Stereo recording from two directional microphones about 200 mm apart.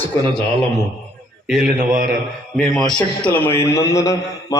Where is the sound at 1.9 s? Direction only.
45° right (ahead or behind).